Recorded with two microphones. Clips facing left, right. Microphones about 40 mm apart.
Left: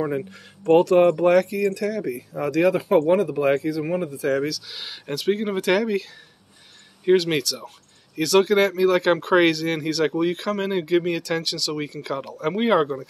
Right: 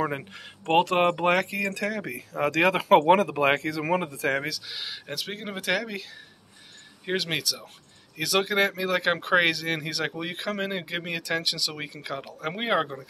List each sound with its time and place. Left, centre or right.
0.0 s speech: right
1.5 s speech: right
2.8 s speech: right
4.4 s speech: right
4.6 s speech: centre
7.1 s speech: centre